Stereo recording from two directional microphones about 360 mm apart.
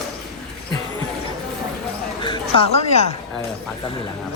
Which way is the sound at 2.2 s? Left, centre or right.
Centre.